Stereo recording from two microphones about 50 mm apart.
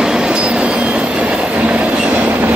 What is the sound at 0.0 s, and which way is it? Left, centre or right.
Train, centre.